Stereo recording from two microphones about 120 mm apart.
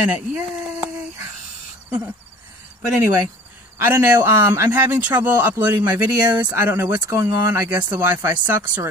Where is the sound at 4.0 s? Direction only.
20° right (ahead or behind).